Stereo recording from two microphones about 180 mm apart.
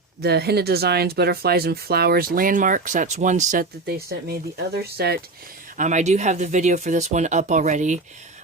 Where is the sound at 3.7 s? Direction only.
60° right (ahead or behind); by 8.4 s 40° right (ahead or behind).